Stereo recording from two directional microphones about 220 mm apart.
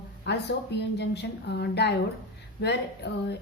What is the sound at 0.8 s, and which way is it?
A woman's voice, 50° left (ahead or behind).